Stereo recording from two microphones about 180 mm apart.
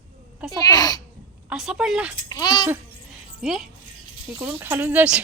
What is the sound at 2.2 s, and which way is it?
Speech, 25° left (ahead or behind).